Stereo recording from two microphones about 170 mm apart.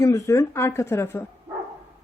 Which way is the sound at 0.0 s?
15° left (ahead or behind).